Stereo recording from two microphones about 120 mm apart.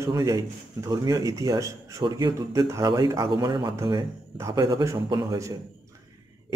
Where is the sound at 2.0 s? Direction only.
40° right (ahead or behind).